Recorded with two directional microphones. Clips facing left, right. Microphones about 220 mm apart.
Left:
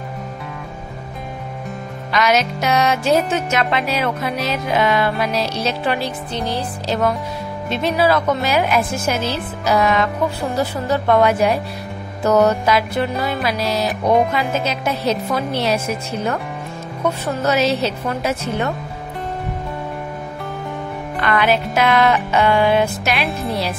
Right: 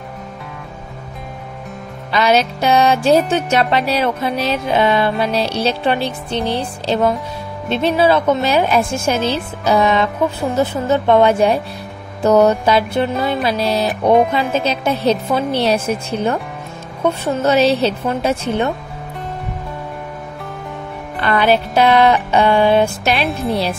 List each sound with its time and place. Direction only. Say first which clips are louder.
2.1 s music: right 3 dB; 30° right (ahead or behind)
21.2 s music: right 3 dB; 30° right (ahead or behind)
23.2 s speech: right 3 dB; centre (ahead or behind)